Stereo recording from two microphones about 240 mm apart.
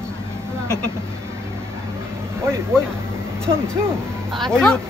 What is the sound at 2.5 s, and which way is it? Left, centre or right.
Speech, centre.